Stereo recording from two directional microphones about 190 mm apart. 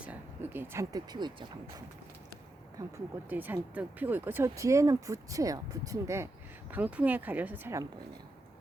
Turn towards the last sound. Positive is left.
turn(degrees=-15)  # may be behind; listen again after turning